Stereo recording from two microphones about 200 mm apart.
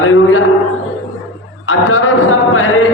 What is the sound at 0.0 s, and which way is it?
Speech, 90° left.